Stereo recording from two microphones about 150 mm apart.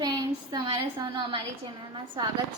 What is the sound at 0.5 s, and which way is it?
A woman's voice, 30° right (ahead or behind).